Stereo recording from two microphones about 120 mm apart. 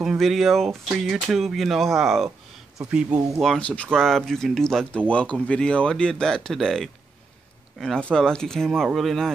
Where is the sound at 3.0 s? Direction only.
30° right (ahead or behind).